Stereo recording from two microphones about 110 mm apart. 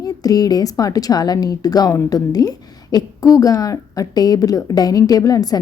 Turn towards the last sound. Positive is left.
turn(degrees=35)  # may be behind; listen again after turning